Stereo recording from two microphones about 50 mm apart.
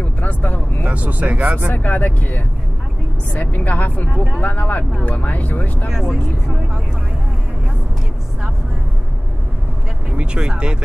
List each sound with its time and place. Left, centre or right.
0.2 s vehicle: left
0.8 s speech: right
1.7 s speech: left
5.9 s speech: centre
10.1 s speech: centre